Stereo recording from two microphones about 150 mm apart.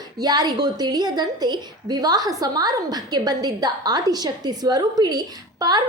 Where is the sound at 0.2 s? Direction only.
25° right (ahead or behind).